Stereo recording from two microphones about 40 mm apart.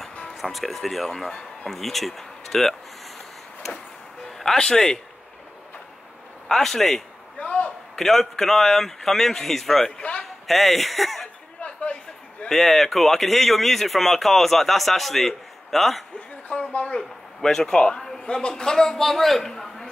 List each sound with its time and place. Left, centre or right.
0.3 s speech: centre
4.6 s a man's voice: centre
6.5 s speech: centre
7.3 s a sound: left
8.0 s a man's voice: centre
10.4 s speech: centre
11.6 s a sound: left
12.4 s speech: centre
16.4 s speech: left
17.4 s a man's voice: centre